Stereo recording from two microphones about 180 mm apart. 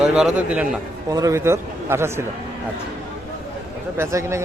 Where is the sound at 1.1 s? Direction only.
15° right (ahead or behind).